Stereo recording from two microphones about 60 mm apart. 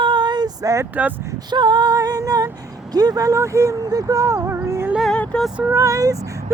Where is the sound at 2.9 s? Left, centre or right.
Right.